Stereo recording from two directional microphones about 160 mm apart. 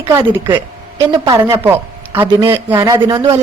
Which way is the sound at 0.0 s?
15° right (ahead or behind).